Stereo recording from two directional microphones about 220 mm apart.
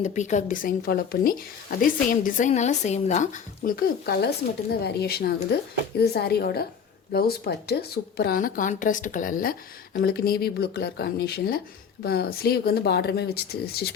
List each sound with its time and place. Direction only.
0.0 s a woman's voice: 35° left (ahead or behind)